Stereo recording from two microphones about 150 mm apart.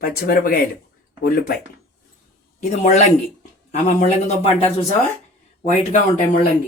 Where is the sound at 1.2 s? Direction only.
90° left.